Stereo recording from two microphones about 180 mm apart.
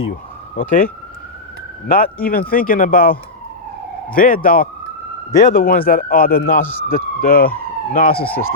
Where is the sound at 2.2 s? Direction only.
50° left (ahead or behind).